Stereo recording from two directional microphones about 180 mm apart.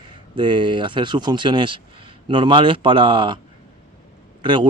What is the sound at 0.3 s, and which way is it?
Speech, 25° right (ahead or behind).